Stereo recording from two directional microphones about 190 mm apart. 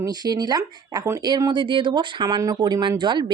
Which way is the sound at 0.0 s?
20° right (ahead or behind).